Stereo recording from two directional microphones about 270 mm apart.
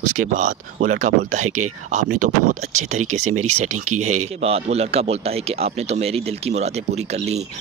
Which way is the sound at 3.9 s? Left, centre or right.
Right.